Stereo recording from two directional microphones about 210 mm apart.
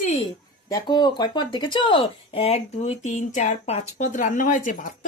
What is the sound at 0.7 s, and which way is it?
Speech, 20° left (ahead or behind).